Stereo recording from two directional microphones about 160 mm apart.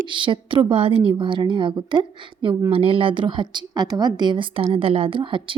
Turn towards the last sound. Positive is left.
turn(degrees=-30)  # may be behind; listen again after turning